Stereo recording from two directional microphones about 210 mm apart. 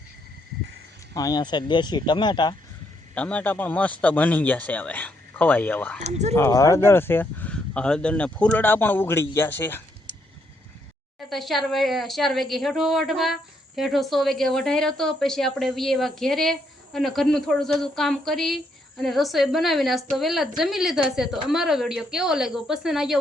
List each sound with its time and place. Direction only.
1.1 s speech: 15° left (ahead or behind)
3.2 s speech: 5° left (ahead or behind)
6.0 s speech: 30° right (ahead or behind)
6.3 s speech: 15° left (ahead or behind)
11.3 s a woman's voice: centre (ahead or behind)